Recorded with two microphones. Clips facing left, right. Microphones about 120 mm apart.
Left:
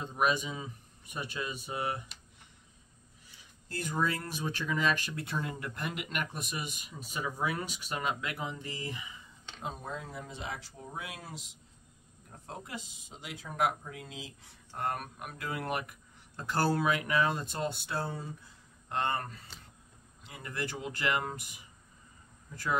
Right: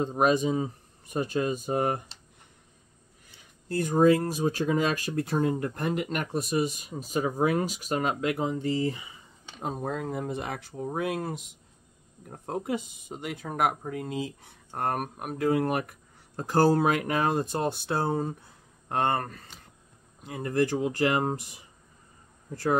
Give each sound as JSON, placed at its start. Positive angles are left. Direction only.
{"t": 0.0, "sound": "speech", "side_deg": -35}
{"t": 3.8, "sound": "speech", "side_deg": -40}
{"t": 9.6, "sound": "speech", "side_deg": -45}
{"t": 9.9, "sound": "speech", "side_deg": -55}